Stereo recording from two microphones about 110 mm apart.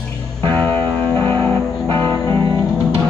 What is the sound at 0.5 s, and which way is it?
Music, 15° left (ahead or behind).